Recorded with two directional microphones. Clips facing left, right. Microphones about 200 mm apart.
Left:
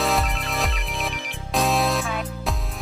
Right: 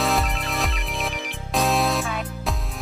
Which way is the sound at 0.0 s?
Centre (ahead or behind).